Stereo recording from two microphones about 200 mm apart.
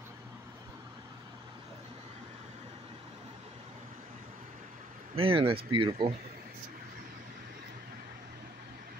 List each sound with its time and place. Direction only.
5.1 s speech: 25° right (ahead or behind)